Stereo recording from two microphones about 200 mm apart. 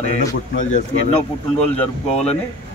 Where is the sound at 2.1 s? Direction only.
30° left (ahead or behind).